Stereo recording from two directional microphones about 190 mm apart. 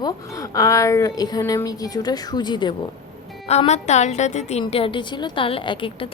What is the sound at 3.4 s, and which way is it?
A woman's voice, 35° left (ahead or behind).